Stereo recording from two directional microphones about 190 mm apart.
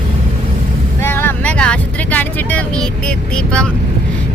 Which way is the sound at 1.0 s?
10° left (ahead or behind).